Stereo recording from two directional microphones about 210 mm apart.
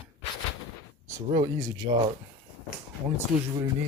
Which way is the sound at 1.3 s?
20° right (ahead or behind).